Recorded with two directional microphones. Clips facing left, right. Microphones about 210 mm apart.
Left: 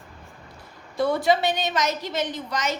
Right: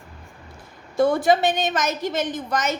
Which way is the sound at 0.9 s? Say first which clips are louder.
Right 3 dB; 45° right (ahead or behind).